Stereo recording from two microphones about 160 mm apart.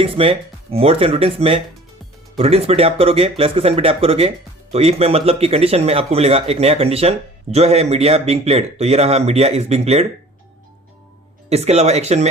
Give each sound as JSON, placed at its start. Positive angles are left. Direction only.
{"t": 0.0, "sound": "speech", "side_deg": -35}
{"t": 11.4, "sound": "speech", "side_deg": -40}